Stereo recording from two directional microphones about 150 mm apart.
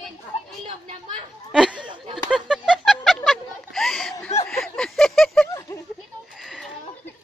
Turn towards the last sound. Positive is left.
turn(degrees=0)  # may be behind; listen again after turning